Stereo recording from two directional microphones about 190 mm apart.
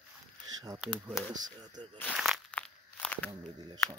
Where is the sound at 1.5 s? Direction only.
20° right (ahead or behind).